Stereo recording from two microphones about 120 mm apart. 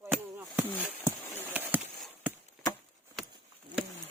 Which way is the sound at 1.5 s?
15° right (ahead or behind).